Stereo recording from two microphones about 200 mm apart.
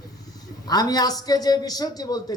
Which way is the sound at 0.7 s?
20° left (ahead or behind).